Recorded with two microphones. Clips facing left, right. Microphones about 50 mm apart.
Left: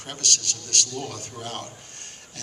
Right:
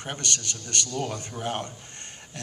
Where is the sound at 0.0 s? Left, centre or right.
Right.